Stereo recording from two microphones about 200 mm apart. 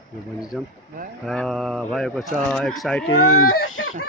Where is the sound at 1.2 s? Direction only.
Centre (ahead or behind).